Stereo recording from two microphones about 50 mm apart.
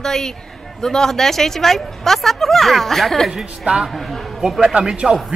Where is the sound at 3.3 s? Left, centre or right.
Centre.